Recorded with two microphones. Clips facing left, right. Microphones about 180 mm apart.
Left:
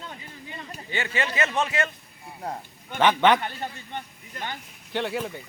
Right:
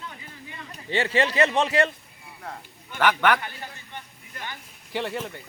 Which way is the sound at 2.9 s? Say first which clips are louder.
Left 2 dB; 20° left (ahead or behind).